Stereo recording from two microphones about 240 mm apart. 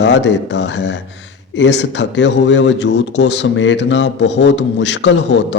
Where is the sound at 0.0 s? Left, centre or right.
Left.